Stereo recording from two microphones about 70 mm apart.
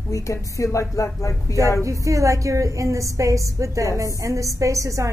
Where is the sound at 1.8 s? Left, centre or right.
Right.